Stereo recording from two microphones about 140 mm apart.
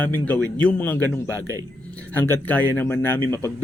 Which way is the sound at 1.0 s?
25° right (ahead or behind).